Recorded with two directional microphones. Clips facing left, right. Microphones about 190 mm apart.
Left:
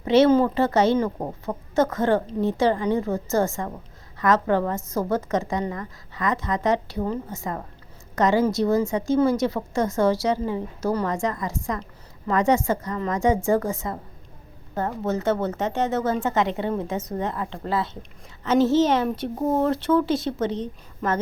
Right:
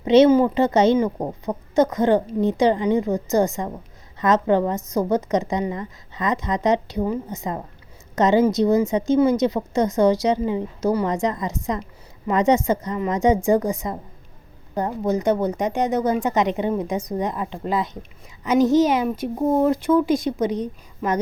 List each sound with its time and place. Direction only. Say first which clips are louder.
0.0 s a woman's voice: right 3 dB; 20° right (ahead or behind)